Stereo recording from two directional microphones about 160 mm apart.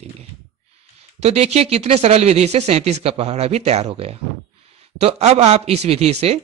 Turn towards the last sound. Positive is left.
turn(degrees=-40)  # may be behind; listen again after turning